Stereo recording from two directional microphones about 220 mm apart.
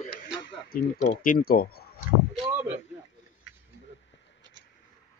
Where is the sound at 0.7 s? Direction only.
35° left (ahead or behind).